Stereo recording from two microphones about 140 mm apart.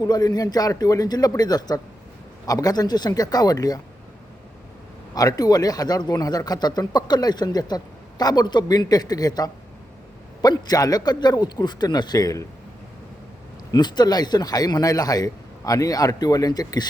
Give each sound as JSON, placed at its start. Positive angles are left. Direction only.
{"t": 0.0, "sound": "speech", "side_deg": 30}
{"t": 5.1, "sound": "a man's voice", "side_deg": 25}
{"t": 13.7, "sound": "speech", "side_deg": 30}